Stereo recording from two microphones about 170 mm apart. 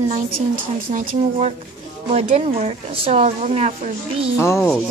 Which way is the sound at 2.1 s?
40° right (ahead or behind).